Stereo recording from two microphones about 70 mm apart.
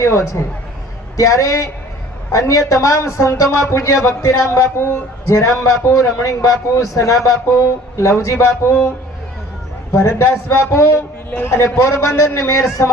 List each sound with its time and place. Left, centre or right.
0.0 s a man's voice: left
7.9 s a man's voice: left
9.9 s a man's voice: left
11.3 s a man's voice: left
11.9 s a man's voice: left